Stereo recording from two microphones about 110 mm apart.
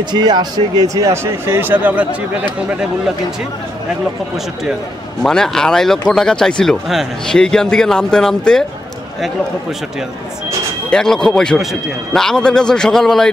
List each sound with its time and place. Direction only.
0.1 s speech: 40° right (ahead or behind); by 2.0 s 15° right (ahead or behind)
5.2 s speech: 5° left (ahead or behind)
10.9 s speech: 5° left (ahead or behind)